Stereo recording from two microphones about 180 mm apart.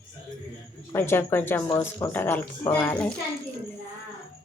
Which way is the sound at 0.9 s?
15° left (ahead or behind).